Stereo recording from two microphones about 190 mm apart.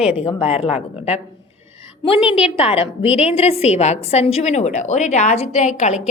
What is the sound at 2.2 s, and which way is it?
A woman's voice, 30° left (ahead or behind).